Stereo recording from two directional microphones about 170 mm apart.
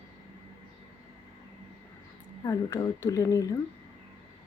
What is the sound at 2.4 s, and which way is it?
Speech, 20° left (ahead or behind).